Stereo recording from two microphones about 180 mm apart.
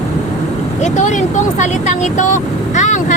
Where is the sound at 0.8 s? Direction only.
40° left (ahead or behind).